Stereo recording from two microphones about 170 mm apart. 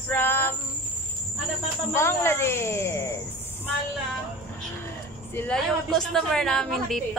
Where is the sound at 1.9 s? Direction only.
15° left (ahead or behind).